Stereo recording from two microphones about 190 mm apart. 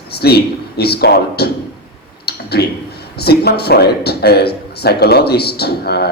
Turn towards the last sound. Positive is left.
turn(degrees=55)  # may be behind; listen again after turning